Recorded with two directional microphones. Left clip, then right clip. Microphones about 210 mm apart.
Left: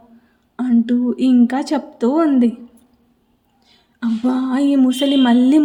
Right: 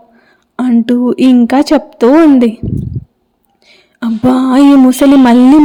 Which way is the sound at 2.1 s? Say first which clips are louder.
Right 9 dB; 30° right (ahead or behind).